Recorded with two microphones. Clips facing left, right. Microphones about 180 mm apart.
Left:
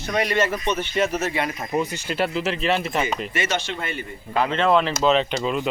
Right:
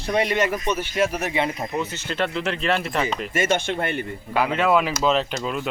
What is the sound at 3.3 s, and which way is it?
Speech, 50° right (ahead or behind).